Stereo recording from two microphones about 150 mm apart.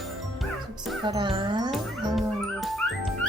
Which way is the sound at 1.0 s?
35° right (ahead or behind).